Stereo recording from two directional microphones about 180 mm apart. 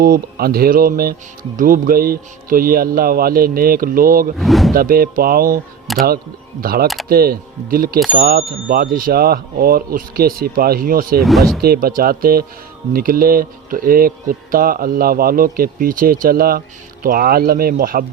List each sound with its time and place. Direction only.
0.0 s a man's voice: 55° right (ahead or behind)
4.4 s speech: centre (ahead or behind)
4.7 s a man's voice: 55° right (ahead or behind)
5.9 s speech: centre (ahead or behind)
6.6 s a man's voice: 55° right (ahead or behind)
11.2 s speech: centre (ahead or behind)
11.6 s a man's voice: 55° right (ahead or behind)